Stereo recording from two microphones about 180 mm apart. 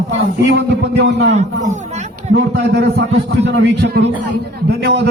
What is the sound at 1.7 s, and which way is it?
Chatter, 40° right (ahead or behind).